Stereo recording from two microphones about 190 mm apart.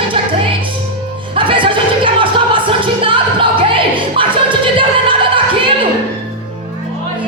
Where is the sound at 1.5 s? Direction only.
25° right (ahead or behind).